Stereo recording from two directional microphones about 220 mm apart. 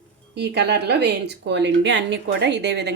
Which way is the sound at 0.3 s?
50° right (ahead or behind).